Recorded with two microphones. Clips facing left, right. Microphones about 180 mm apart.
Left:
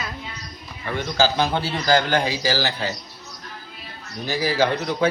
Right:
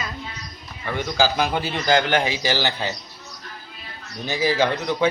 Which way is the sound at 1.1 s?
15° right (ahead or behind).